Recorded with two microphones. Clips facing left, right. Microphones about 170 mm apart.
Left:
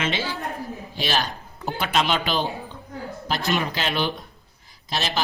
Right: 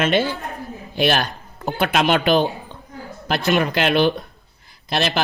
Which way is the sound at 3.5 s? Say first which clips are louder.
Right 8 dB; 65° right (ahead or behind).